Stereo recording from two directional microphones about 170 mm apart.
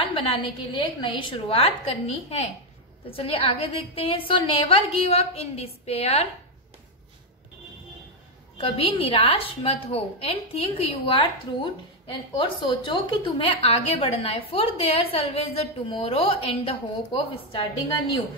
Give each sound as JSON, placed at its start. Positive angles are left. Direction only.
{"t": 0.0, "sound": "a woman's voice", "side_deg": 30}
{"t": 8.5, "sound": "a woman's voice", "side_deg": 35}